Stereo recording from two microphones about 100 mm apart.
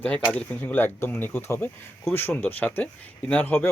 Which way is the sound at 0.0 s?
15° left (ahead or behind).